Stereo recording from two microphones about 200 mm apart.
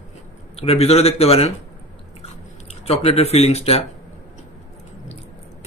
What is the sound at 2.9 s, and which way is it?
Speech, 30° left (ahead or behind).